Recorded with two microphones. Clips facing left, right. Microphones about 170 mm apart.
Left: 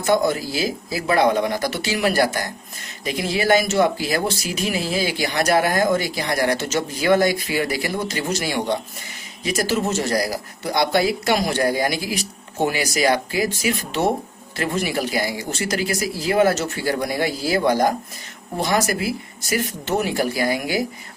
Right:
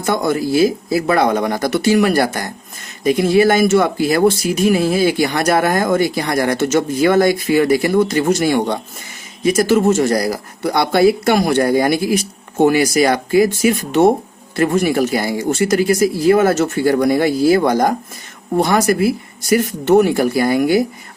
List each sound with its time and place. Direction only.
0.0 s speech: 50° right (ahead or behind)